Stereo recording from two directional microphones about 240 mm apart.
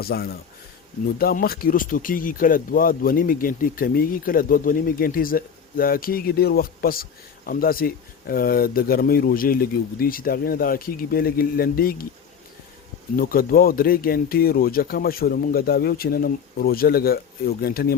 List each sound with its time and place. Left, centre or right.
0.0 s speech: left
13.1 s speech: left